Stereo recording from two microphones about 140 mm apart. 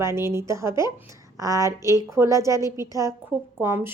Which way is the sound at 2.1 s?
20° right (ahead or behind).